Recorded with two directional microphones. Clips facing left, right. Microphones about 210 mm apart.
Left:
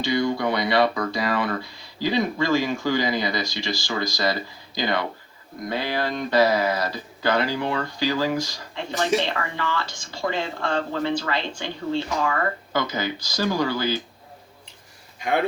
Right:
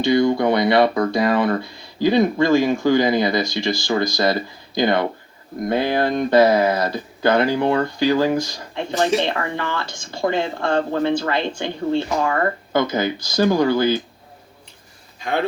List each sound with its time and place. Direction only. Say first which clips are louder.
0.0 s speech: right 6 dB; 50° right (ahead or behind)